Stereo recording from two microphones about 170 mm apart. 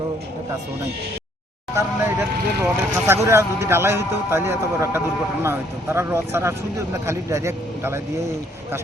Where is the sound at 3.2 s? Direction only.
15° right (ahead or behind).